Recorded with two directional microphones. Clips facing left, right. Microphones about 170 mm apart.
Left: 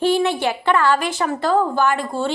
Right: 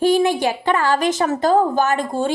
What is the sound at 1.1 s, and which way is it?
Speech, 25° right (ahead or behind).